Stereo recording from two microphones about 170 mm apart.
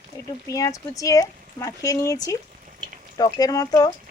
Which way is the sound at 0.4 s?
20° left (ahead or behind).